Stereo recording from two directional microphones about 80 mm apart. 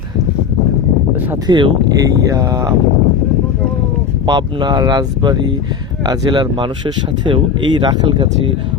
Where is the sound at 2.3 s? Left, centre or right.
Right.